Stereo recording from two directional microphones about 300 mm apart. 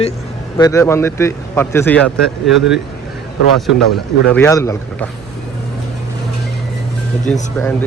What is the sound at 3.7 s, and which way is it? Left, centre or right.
Speech, centre.